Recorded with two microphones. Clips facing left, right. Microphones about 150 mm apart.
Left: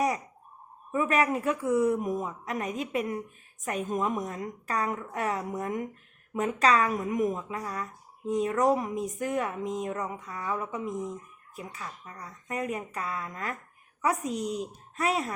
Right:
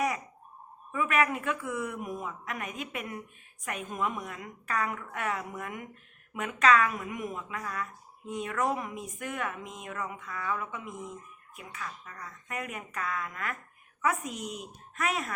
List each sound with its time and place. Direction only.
0.9 s speech: 30° left (ahead or behind)